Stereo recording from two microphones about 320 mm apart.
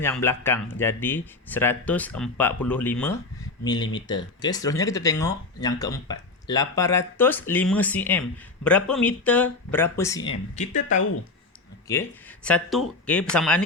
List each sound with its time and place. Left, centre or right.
0.0 s speech: centre; by 11.0 s left
11.9 s speech: centre